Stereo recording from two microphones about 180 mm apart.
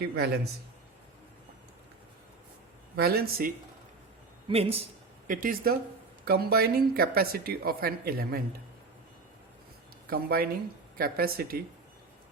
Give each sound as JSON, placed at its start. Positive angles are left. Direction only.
{"t": 0.0, "sound": "a woman's voice", "side_deg": -60}
{"t": 2.9, "sound": "a woman's voice", "side_deg": -60}
{"t": 4.4, "sound": "speech", "side_deg": -30}
{"t": 5.3, "sound": "a woman's voice", "side_deg": -50}
{"t": 10.1, "sound": "a woman's voice", "side_deg": -60}